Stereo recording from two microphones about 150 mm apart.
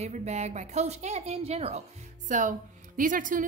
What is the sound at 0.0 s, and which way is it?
A woman's voice, 50° right (ahead or behind).